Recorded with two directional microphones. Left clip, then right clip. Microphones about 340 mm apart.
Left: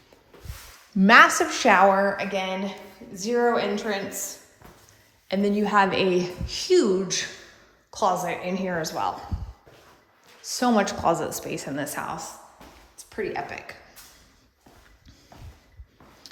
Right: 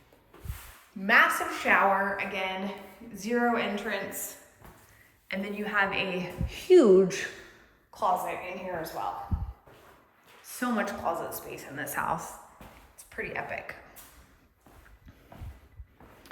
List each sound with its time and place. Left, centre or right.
1.0 s a woman's voice: centre
5.3 s a woman's voice: centre
7.9 s a woman's voice: centre
10.4 s a woman's voice: centre
11.8 s a woman's voice: centre